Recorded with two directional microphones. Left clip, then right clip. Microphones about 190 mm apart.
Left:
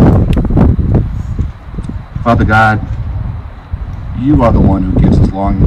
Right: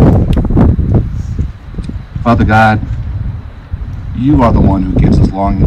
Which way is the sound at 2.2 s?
20° right (ahead or behind).